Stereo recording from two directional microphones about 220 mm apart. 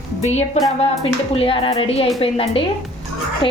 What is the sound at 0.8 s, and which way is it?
A woman's voice, 25° left (ahead or behind).